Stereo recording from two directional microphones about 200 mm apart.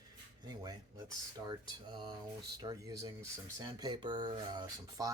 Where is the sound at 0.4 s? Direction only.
20° right (ahead or behind).